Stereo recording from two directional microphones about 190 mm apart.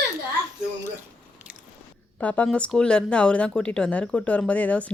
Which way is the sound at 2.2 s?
5° left (ahead or behind).